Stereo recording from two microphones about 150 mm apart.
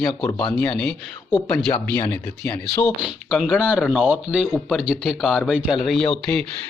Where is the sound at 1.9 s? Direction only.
20° left (ahead or behind).